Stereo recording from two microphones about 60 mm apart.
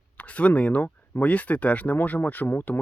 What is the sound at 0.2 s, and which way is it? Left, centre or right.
Speech, left.